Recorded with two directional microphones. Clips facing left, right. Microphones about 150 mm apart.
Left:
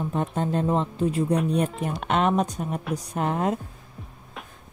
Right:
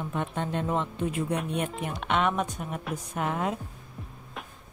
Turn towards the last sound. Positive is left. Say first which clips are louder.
# left 4 dB
turn(degrees=35)  # may be behind; listen again after turning